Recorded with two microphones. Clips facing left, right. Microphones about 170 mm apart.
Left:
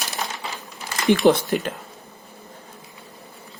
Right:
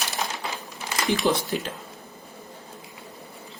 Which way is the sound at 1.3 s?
65° left (ahead or behind).